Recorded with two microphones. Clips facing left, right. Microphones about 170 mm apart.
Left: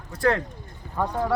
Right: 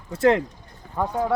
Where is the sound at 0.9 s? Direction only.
5° right (ahead or behind).